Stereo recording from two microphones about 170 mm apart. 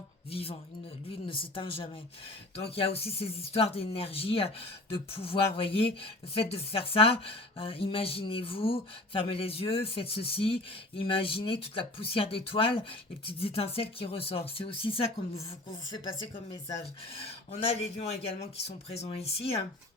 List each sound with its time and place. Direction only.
0.3 s speech: 35° left (ahead or behind)
17.2 s speech: 35° left (ahead or behind)